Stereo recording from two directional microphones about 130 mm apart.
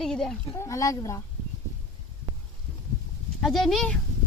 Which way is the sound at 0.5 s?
25° left (ahead or behind).